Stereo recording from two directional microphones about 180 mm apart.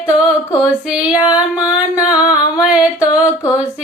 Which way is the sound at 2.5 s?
5° right (ahead or behind).